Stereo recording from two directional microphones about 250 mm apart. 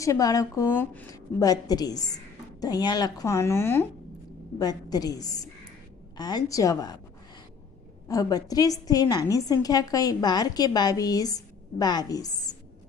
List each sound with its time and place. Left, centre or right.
0.0 s a woman's voice: centre
8.0 s a woman's voice: centre